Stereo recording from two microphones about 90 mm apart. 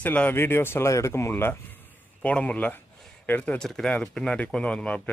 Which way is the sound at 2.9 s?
5° left (ahead or behind).